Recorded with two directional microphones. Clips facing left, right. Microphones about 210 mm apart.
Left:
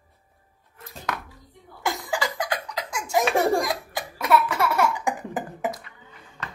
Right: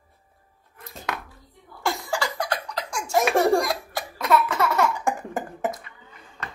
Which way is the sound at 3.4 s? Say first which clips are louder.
Right 2 dB; 20° left (ahead or behind).